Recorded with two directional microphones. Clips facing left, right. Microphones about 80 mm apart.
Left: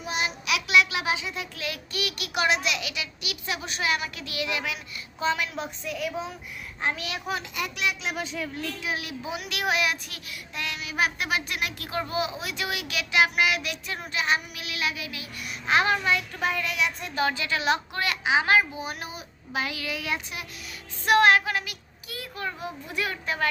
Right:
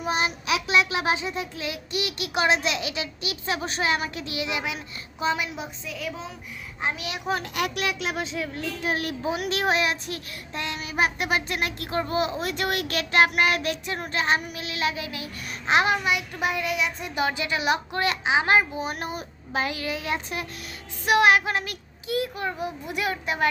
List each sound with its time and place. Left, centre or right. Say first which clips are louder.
0.0 s a child's voice: right 4 dB; right; by 5.6 s centre
5.8 s a woman's voice: left 5 dB; centre
6.8 s a child's voice: right 1 dB; centre
7.5 s a child's voice: right 3 dB; right
8.5 s a child's voice: right 6 dB; right; by 16.9 s centre
17.0 s a woman's voice: right 1 dB; centre
21.0 s a woman's voice: even; centre
21.4 s speech: right 2 dB; right
22.0 s a child's voice: right 7 dB; right